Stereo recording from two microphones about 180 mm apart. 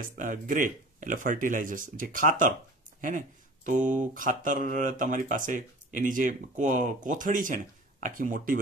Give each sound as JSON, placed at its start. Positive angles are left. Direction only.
{"t": 0.2, "sound": "speech", "side_deg": -50}